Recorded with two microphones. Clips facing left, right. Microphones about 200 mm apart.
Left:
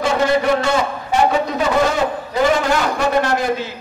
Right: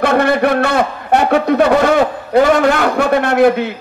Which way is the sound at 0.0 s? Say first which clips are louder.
Right 4 dB; 60° right (ahead or behind).